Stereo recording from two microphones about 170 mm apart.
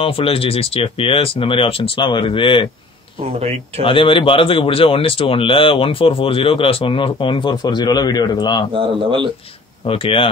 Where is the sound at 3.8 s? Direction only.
30° left (ahead or behind).